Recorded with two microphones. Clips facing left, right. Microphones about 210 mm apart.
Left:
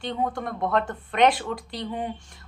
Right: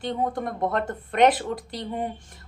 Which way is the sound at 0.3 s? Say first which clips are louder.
Even; 40° right (ahead or behind).